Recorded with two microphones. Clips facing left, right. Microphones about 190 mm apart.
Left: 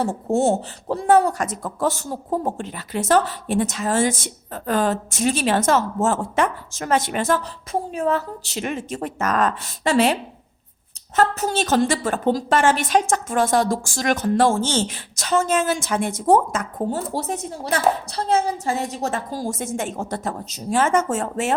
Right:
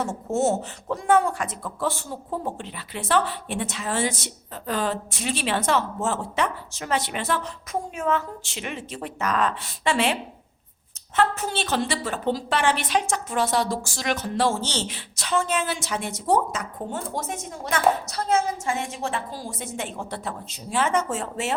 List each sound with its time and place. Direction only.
0.0 s a woman's voice: 35° left (ahead or behind)
11.2 s a woman's voice: 40° left (ahead or behind)
16.9 s a woman's voice: 35° left (ahead or behind)